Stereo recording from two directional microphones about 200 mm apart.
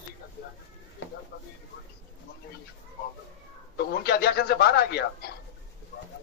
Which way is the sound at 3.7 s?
50° left (ahead or behind).